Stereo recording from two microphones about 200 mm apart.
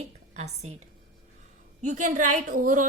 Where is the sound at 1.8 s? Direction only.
40° right (ahead or behind).